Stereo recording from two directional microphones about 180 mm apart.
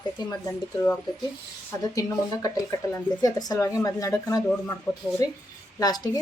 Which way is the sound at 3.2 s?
20° left (ahead or behind).